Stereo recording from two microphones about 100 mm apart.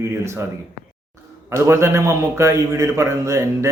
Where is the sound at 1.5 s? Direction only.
30° right (ahead or behind).